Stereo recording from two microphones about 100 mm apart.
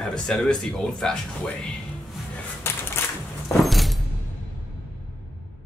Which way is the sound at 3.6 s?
Centre (ahead or behind).